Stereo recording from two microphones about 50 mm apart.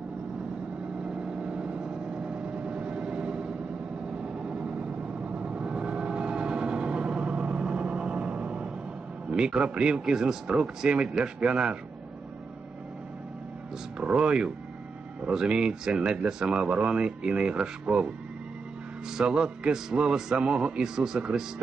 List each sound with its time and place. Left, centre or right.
1.0 s vehicle: centre
9.3 s speech: centre
13.9 s speech: right
19.1 s speech: centre